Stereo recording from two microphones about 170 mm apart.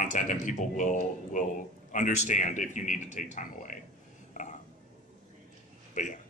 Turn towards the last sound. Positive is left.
turn(degrees=50)  # may be behind; listen again after turning